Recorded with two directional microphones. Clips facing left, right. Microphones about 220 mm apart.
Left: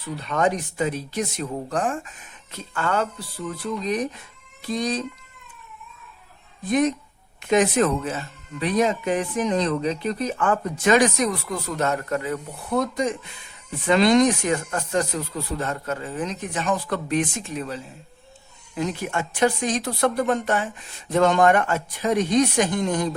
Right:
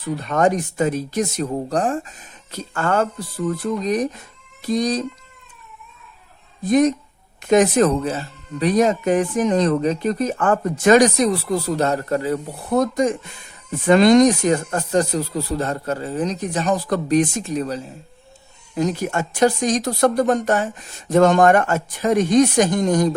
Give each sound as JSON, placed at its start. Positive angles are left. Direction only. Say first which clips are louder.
{"t": 0.2, "sound": "speech", "louder": "right 4 dB", "side_deg": -45}
{"t": 6.7, "sound": "speech", "louder": "right 5 dB", "side_deg": -40}